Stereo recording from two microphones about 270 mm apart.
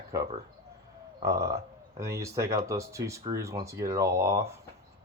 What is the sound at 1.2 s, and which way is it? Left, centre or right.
Speech, centre.